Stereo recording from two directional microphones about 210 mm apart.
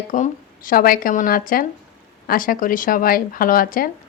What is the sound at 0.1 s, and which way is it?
A woman's voice, 40° left (ahead or behind).